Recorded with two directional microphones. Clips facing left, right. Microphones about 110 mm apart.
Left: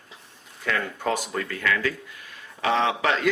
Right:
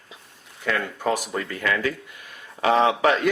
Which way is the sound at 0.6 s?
5° right (ahead or behind).